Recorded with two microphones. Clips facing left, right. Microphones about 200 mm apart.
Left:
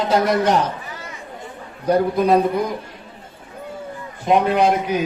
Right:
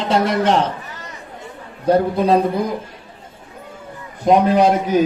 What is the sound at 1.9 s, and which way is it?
Speech, 30° right (ahead or behind).